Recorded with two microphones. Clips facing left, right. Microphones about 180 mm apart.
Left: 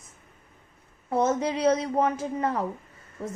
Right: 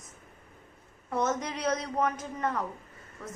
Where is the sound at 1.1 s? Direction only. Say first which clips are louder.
Left 6 dB; 30° left (ahead or behind).